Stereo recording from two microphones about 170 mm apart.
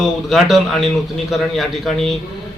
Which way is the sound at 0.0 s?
Centre (ahead or behind).